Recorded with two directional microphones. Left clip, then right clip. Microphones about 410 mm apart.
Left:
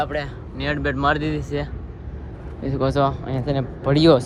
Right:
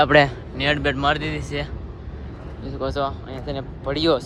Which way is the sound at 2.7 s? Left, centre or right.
Left.